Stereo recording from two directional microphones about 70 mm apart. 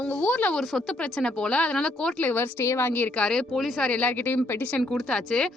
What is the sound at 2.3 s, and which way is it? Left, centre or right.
Speech, left.